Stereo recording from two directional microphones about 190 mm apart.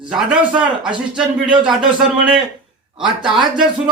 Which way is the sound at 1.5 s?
25° right (ahead or behind).